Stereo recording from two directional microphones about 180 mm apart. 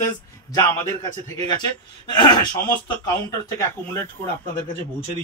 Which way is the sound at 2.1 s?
25° left (ahead or behind).